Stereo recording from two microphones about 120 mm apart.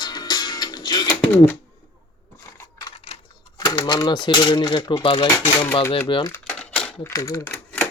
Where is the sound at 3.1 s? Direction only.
60° left (ahead or behind).